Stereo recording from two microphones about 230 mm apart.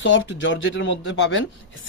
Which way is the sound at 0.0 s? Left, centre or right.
Left.